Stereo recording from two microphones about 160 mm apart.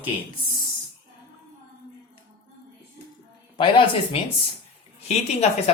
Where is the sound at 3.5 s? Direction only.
30° left (ahead or behind).